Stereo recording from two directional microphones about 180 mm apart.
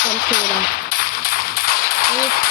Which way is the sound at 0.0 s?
50° left (ahead or behind).